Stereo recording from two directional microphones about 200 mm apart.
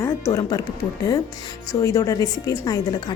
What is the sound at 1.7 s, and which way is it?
A woman's voice, 15° left (ahead or behind).